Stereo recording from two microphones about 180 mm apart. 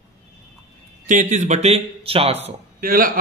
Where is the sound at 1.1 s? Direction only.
45° right (ahead or behind).